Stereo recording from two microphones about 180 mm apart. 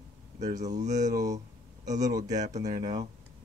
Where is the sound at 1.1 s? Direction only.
20° right (ahead or behind).